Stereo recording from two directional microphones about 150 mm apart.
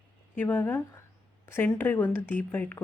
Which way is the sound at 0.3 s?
10° left (ahead or behind).